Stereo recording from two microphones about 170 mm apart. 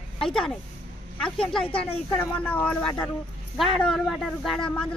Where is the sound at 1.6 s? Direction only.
35° left (ahead or behind).